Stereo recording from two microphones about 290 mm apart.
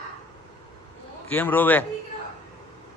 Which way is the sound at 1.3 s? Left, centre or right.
Centre.